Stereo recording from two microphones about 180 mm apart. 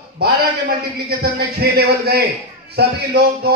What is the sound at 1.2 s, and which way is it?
A man's voice, 60° right (ahead or behind).